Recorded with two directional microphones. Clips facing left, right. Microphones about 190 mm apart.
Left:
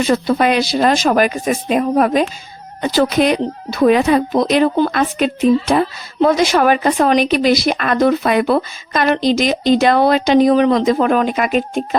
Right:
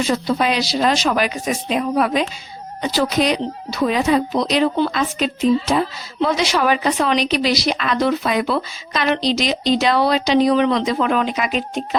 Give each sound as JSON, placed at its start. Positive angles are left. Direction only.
{"t": 0.0, "sound": "speech", "side_deg": 55}